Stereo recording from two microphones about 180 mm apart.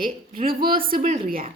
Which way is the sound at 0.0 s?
50° right (ahead or behind).